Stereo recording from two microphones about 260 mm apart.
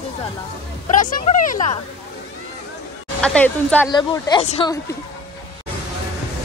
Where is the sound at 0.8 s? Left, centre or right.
Left.